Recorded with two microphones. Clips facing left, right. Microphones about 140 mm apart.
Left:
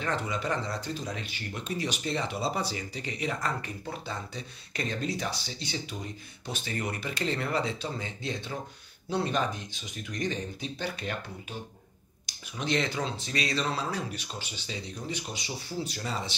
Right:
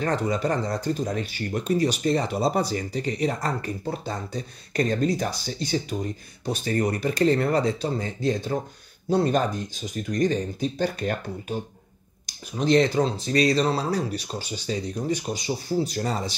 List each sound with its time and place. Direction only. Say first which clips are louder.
0.0 s speech: right 7 dB; 40° right (ahead or behind)